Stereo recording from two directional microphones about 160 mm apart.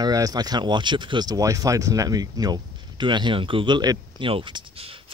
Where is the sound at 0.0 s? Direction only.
25° right (ahead or behind).